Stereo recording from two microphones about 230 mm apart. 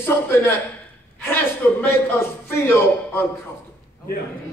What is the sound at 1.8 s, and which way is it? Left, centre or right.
Speech, centre.